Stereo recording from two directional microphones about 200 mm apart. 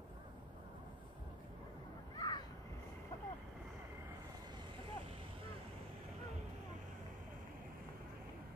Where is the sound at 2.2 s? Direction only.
20° left (ahead or behind).